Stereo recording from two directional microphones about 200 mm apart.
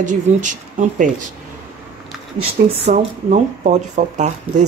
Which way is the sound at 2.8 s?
40° right (ahead or behind).